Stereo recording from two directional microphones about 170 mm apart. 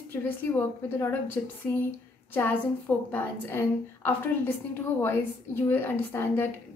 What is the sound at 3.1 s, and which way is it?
A woman's voice, 15° left (ahead or behind).